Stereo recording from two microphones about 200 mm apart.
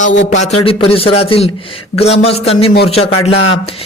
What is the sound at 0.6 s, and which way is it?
A man's voice, 30° left (ahead or behind).